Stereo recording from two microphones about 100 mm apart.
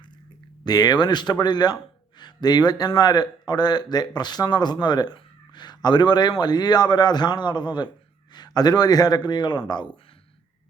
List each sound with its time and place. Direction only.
0.6 s speech: 45° left (ahead or behind)